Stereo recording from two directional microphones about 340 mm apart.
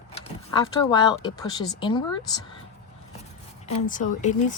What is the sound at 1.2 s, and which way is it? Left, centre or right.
Speech, centre.